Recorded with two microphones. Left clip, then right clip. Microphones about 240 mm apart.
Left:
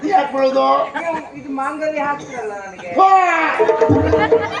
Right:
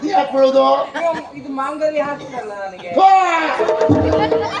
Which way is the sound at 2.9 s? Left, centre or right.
Right.